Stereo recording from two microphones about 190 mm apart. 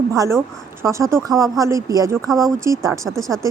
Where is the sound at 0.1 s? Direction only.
20° right (ahead or behind).